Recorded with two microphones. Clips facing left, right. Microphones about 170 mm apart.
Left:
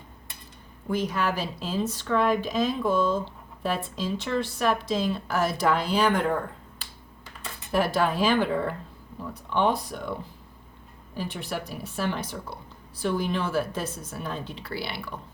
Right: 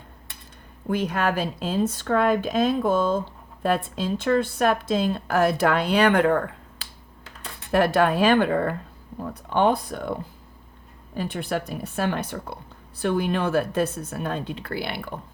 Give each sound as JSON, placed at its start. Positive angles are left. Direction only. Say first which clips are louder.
{"t": 0.9, "sound": "a woman's voice", "louder": "right 3 dB", "side_deg": -55}
{"t": 7.7, "sound": "a woman's voice", "louder": "right 5 dB", "side_deg": -65}